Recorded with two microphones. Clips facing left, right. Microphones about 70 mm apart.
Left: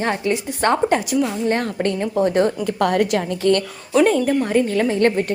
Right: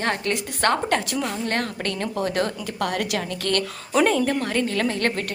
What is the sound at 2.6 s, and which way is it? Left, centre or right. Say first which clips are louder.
Speech: left 8 dB; left.